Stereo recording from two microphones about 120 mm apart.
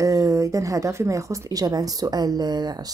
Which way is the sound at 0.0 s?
25° right (ahead or behind).